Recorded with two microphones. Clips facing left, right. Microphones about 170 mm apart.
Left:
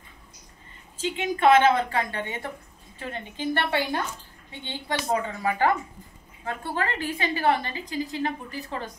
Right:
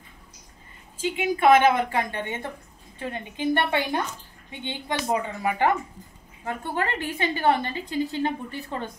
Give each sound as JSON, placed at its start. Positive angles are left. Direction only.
{"t": 0.9, "sound": "a woman's voice", "side_deg": -10}